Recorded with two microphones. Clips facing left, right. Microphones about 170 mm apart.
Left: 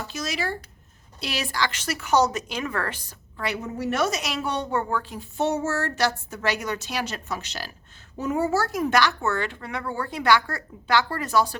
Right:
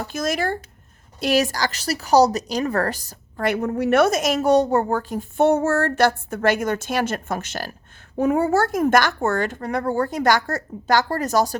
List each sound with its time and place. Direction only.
0.0 s a woman's voice: 50° right (ahead or behind)